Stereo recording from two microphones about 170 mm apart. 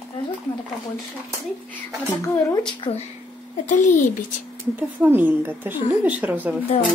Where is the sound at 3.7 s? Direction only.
45° left (ahead or behind).